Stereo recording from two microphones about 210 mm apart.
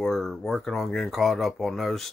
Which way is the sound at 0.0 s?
Centre (ahead or behind).